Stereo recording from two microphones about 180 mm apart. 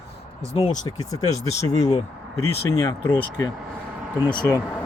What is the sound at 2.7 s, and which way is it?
Speech, 15° left (ahead or behind).